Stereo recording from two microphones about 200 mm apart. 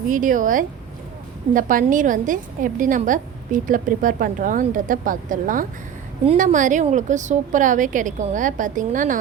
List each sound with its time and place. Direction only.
0.1 s a woman's voice: 40° right (ahead or behind)